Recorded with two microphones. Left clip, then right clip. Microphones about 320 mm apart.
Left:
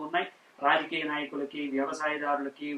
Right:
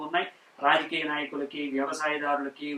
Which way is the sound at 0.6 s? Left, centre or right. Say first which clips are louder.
Right 2 dB; centre.